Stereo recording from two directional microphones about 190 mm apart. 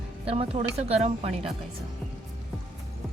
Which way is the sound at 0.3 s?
30° right (ahead or behind).